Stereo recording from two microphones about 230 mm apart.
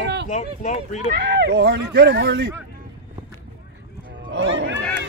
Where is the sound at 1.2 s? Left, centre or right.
Right.